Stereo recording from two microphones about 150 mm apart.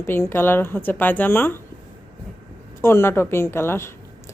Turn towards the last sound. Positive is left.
turn(degrees=15)  # may be behind; listen again after turning